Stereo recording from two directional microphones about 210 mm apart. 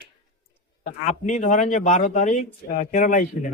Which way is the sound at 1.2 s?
35° left (ahead or behind).